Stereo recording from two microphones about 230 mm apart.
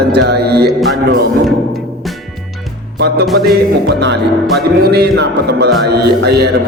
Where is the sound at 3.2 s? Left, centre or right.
Centre.